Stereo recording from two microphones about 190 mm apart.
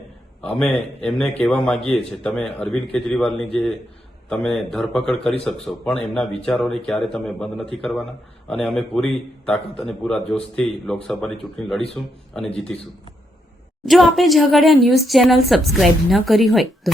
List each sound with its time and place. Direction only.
0.4 s a man's voice: 5° left (ahead or behind)
13.8 s a man's voice: centre (ahead or behind)